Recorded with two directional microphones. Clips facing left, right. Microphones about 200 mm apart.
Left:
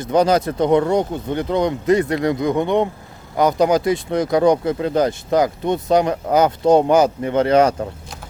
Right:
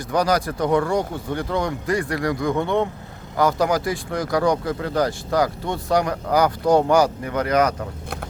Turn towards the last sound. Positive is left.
turn(degrees=30)  # may be behind; listen again after turning